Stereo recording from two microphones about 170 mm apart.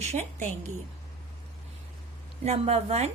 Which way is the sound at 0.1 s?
45° right (ahead or behind).